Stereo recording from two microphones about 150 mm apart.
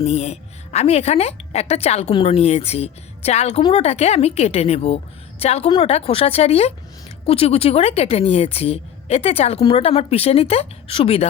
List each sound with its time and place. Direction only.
0.0 s a woman's voice: 45° left (ahead or behind)